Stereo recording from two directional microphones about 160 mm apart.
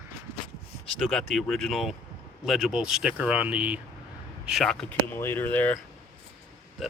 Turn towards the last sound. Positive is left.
turn(degrees=10)  # may be behind; listen again after turning